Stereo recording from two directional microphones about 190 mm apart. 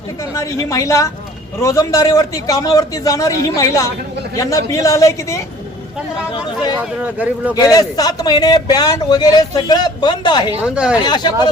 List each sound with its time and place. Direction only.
0.3 s a man's voice: 15° left (ahead or behind)
7.0 s speech: 10° right (ahead or behind)
7.5 s a man's voice: 20° left (ahead or behind)
10.6 s speech: 5° right (ahead or behind)
11.0 s a man's voice: 20° left (ahead or behind)